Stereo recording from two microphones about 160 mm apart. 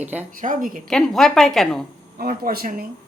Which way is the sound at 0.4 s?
55° right (ahead or behind).